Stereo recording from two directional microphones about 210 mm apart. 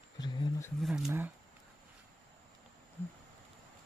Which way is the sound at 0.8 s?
5° right (ahead or behind).